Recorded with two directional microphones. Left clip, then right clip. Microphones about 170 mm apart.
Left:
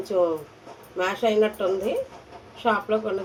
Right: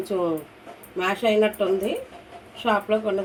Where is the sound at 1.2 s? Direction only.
35° right (ahead or behind).